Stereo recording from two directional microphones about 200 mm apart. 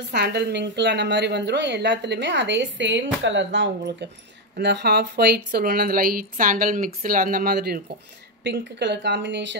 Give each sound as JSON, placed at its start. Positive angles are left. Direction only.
{"t": 0.1, "sound": "a woman's voice", "side_deg": -55}